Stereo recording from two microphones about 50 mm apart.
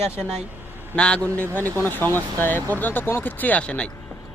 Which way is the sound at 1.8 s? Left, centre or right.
Left.